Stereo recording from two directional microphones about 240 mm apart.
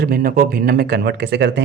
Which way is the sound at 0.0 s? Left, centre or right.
Right.